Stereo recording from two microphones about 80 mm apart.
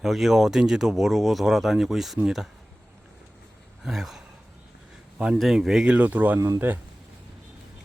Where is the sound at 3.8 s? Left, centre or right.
Centre.